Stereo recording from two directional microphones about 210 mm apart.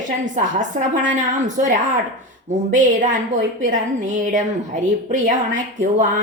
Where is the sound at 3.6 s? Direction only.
35° right (ahead or behind).